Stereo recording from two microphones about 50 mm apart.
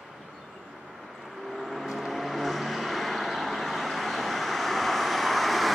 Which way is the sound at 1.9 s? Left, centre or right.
Centre.